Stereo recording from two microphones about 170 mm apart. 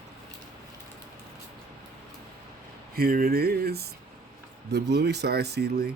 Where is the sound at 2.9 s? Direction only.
60° right (ahead or behind).